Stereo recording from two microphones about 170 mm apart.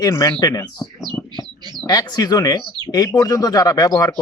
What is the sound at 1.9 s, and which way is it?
Speech, 20° left (ahead or behind).